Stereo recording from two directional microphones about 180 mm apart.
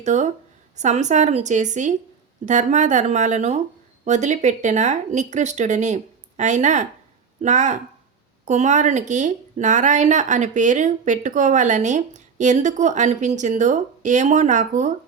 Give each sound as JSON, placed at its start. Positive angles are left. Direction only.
{"t": 0.0, "sound": "a woman's voice", "side_deg": -40}